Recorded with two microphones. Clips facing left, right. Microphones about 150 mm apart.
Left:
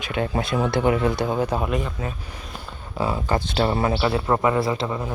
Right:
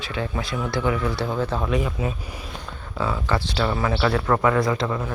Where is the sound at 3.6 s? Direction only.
30° left (ahead or behind).